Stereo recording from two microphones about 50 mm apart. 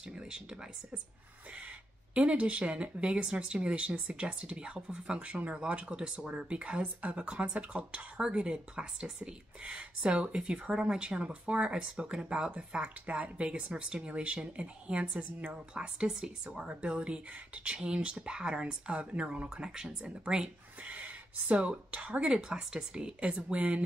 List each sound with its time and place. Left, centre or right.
0.0 s speech: centre
2.1 s speech: right